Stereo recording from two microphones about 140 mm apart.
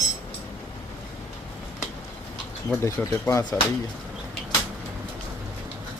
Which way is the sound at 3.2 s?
25° left (ahead or behind).